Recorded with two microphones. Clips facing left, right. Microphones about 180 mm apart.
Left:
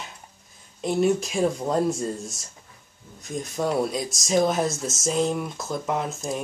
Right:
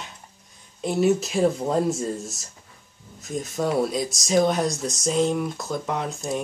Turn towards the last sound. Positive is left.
turn(degrees=0)  # may be behind; listen again after turning